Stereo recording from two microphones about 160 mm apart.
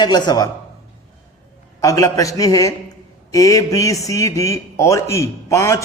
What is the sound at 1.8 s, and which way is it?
A man's voice, 20° left (ahead or behind).